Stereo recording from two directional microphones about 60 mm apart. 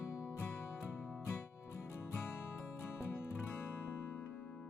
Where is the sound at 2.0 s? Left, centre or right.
Left.